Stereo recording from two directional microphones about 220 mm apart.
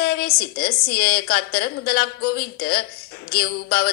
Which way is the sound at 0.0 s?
45° left (ahead or behind).